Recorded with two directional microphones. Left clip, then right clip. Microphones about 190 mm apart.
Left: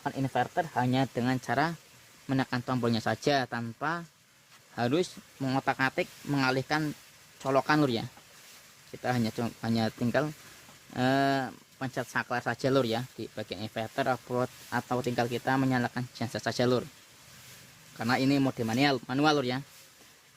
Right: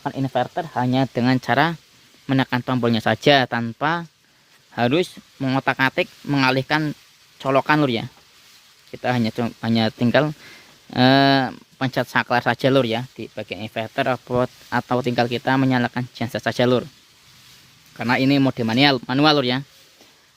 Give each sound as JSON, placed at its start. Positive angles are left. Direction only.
{"t": 0.0, "sound": "speech", "side_deg": -45}
{"t": 17.9, "sound": "speech", "side_deg": -40}